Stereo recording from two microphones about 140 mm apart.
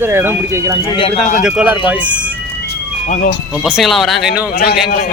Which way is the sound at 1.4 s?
10° right (ahead or behind).